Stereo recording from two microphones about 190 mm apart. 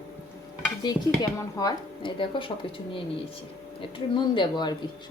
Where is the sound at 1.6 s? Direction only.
25° left (ahead or behind).